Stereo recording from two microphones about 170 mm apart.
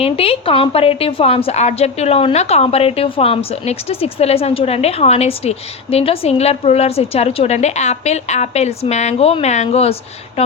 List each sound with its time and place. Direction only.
0.0 s a woman's voice: 35° left (ahead or behind)